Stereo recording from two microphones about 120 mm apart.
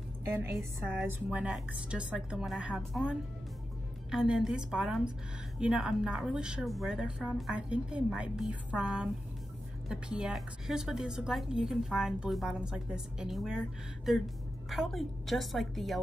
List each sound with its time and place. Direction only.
0.2 s a woman's voice: 20° right (ahead or behind); by 16.0 s centre (ahead or behind)